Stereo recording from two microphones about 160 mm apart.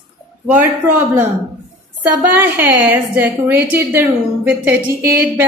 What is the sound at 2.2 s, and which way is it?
A woman's voice, 10° right (ahead or behind).